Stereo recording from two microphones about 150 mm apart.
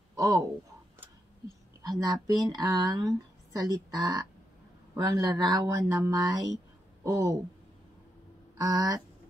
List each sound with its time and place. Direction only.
0.1 s a sound: 20° right (ahead or behind)
1.8 s speech: 25° right (ahead or behind)
8.5 s speech: 25° right (ahead or behind)